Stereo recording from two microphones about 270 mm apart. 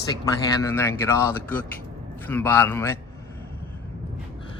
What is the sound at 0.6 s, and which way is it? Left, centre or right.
Speech, centre.